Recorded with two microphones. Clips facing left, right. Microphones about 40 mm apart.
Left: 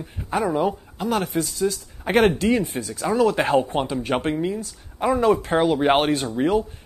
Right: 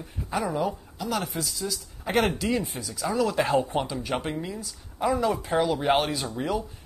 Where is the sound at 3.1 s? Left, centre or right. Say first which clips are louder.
Left 7 dB; left.